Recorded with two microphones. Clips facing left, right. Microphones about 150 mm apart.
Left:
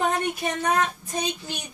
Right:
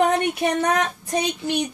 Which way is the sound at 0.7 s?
75° right (ahead or behind).